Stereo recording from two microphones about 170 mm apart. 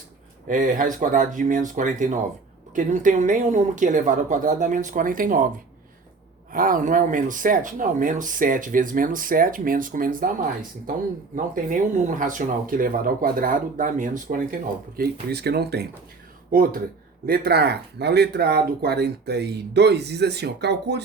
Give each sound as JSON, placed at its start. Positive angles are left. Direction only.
{"t": 0.4, "sound": "speech", "side_deg": -50}
{"t": 6.5, "sound": "speech", "side_deg": -55}
{"t": 11.5, "sound": "speech", "side_deg": -50}
{"t": 14.9, "sound": "speech", "side_deg": -70}
{"t": 16.5, "sound": "speech", "side_deg": -60}
{"t": 17.2, "sound": "speech", "side_deg": -70}